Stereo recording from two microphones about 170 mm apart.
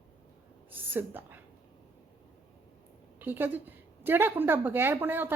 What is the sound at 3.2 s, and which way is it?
A woman's voice, 10° right (ahead or behind).